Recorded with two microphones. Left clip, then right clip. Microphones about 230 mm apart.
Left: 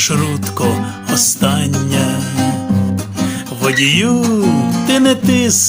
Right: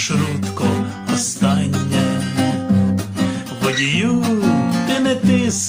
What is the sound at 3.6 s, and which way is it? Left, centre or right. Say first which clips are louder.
Music: left 6 dB; left.